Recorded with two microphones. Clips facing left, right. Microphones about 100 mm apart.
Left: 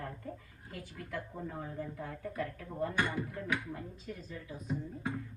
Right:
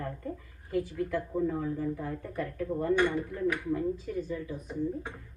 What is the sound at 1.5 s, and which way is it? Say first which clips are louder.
Speech: right 9 dB; 65° right (ahead or behind).